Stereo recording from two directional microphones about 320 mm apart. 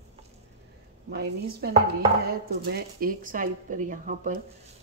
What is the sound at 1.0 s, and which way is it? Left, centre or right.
Speech, right.